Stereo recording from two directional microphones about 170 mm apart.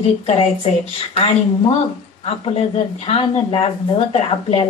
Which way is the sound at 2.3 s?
40° left (ahead or behind).